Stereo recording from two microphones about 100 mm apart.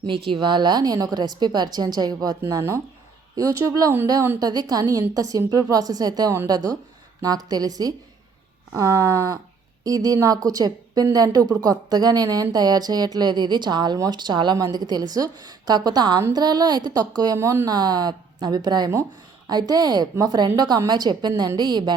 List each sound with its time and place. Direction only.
0.0 s a woman's voice: 55° right (ahead or behind)
17.3 s speech: 25° right (ahead or behind)
17.7 s a woman's voice: 45° right (ahead or behind)